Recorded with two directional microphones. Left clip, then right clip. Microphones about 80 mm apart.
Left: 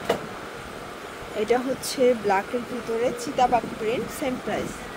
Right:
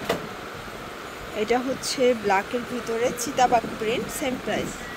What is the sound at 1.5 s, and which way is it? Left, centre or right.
Speech, left.